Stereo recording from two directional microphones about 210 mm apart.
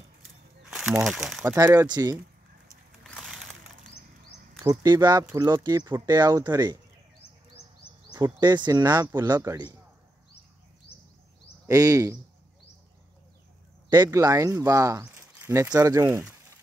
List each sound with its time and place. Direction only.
0.7 s a sound: centre (ahead or behind)
1.0 s speech: centre (ahead or behind)
1.4 s speech: 15° right (ahead or behind)
3.0 s a sound: centre (ahead or behind)
4.6 s speech: 20° right (ahead or behind)
8.1 s speech: 20° right (ahead or behind)
11.6 s speech: 15° right (ahead or behind)
13.8 s speech: 20° right (ahead or behind)